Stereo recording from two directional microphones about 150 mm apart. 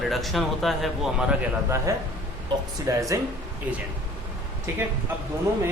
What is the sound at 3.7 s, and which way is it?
Speech, 10° right (ahead or behind).